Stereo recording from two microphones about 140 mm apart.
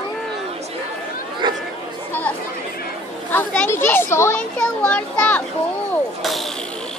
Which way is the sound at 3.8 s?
15° left (ahead or behind).